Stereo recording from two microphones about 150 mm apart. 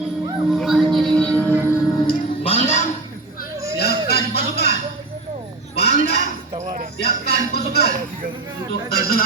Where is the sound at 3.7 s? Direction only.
90° left.